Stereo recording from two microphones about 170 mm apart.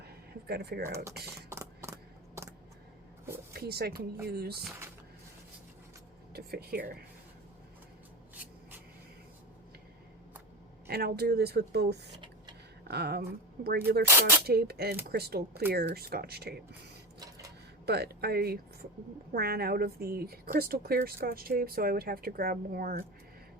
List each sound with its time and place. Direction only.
0.0 s a sound: 70° right (ahead or behind)
1.5 s a sound: 15° right (ahead or behind)
3.5 s speech: 65° right (ahead or behind)
6.3 s speech: 65° right (ahead or behind)
10.8 s speech: 65° right (ahead or behind)
12.1 s a sound: 25° right (ahead or behind)
12.9 s speech: 70° right (ahead or behind)
14.1 s speech: 15° right (ahead or behind)
14.4 s speech: 65° right (ahead or behind)
17.8 s speech: 70° right (ahead or behind)